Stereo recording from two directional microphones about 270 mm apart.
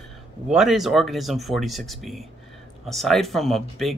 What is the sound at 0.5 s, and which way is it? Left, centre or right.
Speech, centre.